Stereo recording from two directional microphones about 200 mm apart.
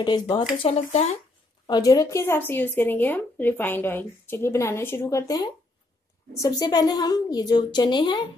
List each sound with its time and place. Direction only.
0.0 s a woman's voice: 20° left (ahead or behind)
1.7 s a woman's voice: 15° left (ahead or behind)